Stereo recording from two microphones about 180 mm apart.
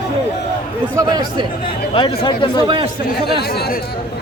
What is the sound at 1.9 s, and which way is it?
Speech, 25° left (ahead or behind).